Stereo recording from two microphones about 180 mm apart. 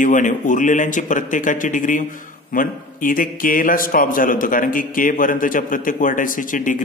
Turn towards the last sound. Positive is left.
turn(degrees=45)  # may be behind; listen again after turning